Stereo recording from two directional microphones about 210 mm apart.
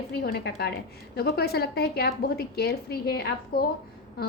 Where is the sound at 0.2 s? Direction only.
50° left (ahead or behind).